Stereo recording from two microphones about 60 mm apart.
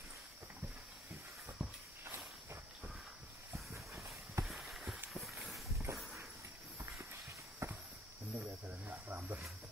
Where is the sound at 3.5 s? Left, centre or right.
Right.